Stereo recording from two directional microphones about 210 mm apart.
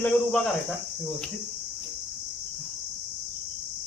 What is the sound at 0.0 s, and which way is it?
Speech, 5° left (ahead or behind).